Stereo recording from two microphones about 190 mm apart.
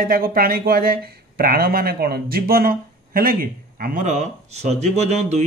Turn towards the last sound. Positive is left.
turn(degrees=-35)  # may be behind; listen again after turning